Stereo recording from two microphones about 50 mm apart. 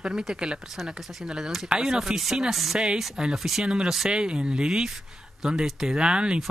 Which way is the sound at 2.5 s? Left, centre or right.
Centre.